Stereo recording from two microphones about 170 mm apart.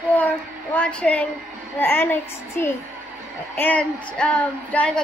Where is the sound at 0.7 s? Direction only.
5° left (ahead or behind).